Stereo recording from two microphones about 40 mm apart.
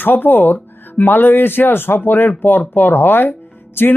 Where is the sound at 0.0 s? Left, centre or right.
Left.